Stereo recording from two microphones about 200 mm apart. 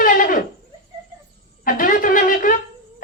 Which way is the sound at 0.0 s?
45° left (ahead or behind).